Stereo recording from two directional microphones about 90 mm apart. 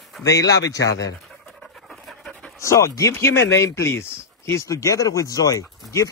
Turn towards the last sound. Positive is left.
turn(degrees=40)  # may be behind; listen again after turning